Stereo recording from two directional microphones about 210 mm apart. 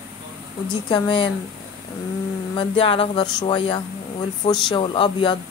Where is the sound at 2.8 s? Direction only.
25° left (ahead or behind).